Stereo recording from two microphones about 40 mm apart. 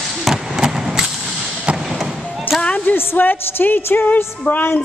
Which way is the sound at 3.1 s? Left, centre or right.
Left.